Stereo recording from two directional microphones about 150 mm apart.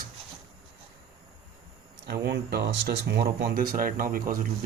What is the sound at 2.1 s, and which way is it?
Speech, 90° right.